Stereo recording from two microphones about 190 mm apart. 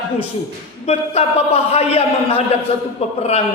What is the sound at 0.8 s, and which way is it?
A man's voice, 35° left (ahead or behind).